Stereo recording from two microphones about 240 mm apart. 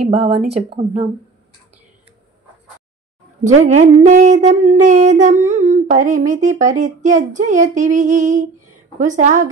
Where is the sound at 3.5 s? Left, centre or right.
Right.